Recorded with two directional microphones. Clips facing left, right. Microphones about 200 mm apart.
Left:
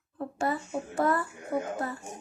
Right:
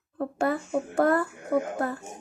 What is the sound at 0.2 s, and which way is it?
Speech, 55° right (ahead or behind).